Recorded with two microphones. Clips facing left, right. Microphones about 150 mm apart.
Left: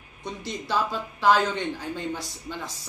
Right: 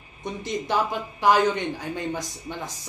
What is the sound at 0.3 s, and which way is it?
Speech, 20° right (ahead or behind).